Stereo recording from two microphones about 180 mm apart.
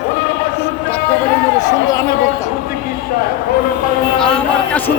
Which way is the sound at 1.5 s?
20° left (ahead or behind).